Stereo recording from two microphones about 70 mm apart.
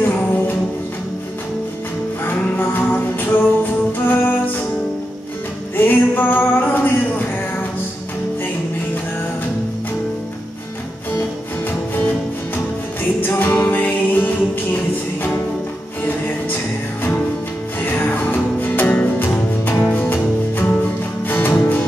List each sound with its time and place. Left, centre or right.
0.0 s music: left
2.2 s music: left
5.8 s a sound: left
13.2 s music: left
17.7 s music: left